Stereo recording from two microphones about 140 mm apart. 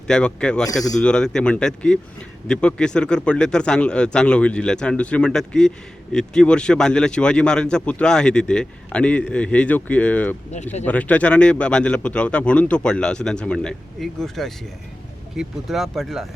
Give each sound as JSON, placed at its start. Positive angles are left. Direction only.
{"t": 0.1, "sound": "speech", "side_deg": 5}
{"t": 10.5, "sound": "speech", "side_deg": 55}
{"t": 10.8, "sound": "speech", "side_deg": 10}